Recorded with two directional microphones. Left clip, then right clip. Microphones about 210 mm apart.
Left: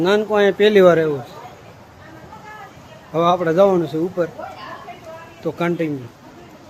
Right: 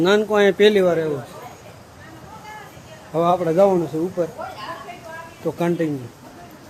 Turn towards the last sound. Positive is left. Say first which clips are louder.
# left 1 dB
turn(degrees=0)  # may be behind; listen again after turning